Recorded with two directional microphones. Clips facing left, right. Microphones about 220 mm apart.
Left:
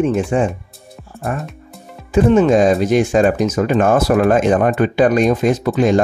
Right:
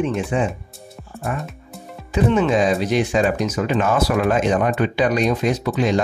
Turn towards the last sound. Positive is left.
turn(degrees=50)  # may be behind; listen again after turning